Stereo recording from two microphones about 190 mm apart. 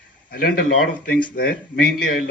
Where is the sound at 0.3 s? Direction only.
50° left (ahead or behind).